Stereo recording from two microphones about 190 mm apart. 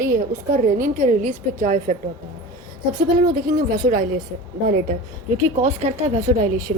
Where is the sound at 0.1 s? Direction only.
45° right (ahead or behind).